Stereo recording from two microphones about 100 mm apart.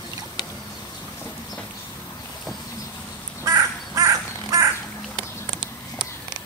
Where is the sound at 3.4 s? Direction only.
35° right (ahead or behind).